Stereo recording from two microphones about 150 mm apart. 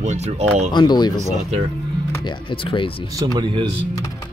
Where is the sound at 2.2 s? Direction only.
35° left (ahead or behind).